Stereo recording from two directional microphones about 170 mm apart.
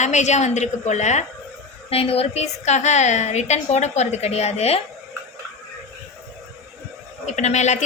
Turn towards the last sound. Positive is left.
turn(degrees=45)  # may be behind; listen again after turning